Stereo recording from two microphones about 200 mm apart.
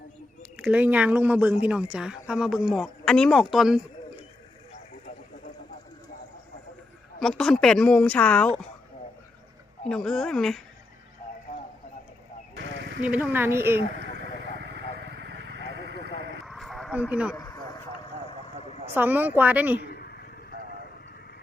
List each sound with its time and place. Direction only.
0.5 s speech: 5° right (ahead or behind)
7.2 s speech: 5° left (ahead or behind)
9.9 s speech: 5° left (ahead or behind)
13.0 s speech: 5° right (ahead or behind)
14.6 s vehicle: 60° right (ahead or behind)
16.5 s a sound: centre (ahead or behind)
17.3 s a sound: 20° left (ahead or behind)
18.3 s vehicle: 30° left (ahead or behind)
18.9 s speech: 10° right (ahead or behind)
19.8 s a sound: 50° left (ahead or behind)